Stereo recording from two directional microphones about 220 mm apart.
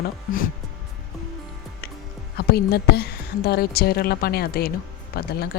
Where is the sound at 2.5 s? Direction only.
45° left (ahead or behind).